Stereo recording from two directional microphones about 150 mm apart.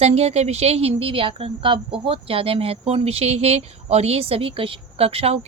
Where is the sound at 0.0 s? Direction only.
45° right (ahead or behind).